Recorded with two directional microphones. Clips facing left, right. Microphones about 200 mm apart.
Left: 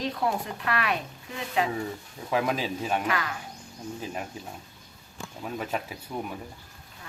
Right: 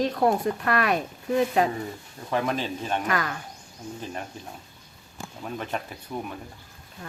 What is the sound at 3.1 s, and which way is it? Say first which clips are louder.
Speech: right 2 dB; 45° right (ahead or behind).